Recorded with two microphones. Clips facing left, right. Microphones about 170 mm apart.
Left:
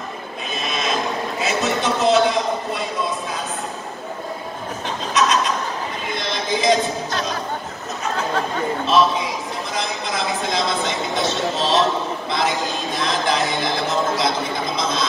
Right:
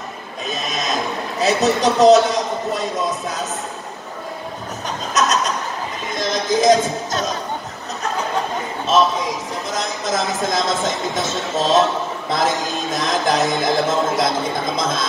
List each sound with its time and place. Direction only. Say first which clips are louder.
0.5 s a sound: right 1 dB; 40° right (ahead or behind)
1.4 s a man's voice: right 6 dB; 40° right (ahead or behind)
5.1 s chuckle: even; 45° right (ahead or behind)
6.1 s music: right 6 dB; 45° right (ahead or behind)
8.9 s a sound: right 2 dB; 45° right (ahead or behind)
12.3 s music: right 3 dB; 45° right (ahead or behind)
13.8 s speech: right 2 dB; 45° right (ahead or behind)